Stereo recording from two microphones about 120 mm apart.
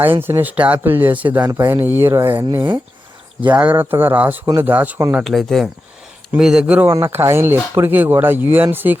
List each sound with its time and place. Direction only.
0.0 s speech: 20° right (ahead or behind)
1.5 s speech: 25° right (ahead or behind)
5.2 s speech: centre (ahead or behind)
6.8 s speech: 20° right (ahead or behind)